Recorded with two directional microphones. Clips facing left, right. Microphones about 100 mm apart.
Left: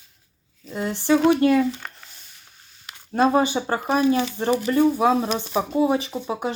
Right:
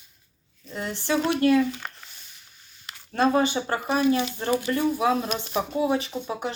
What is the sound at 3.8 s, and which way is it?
Speech, 35° left (ahead or behind).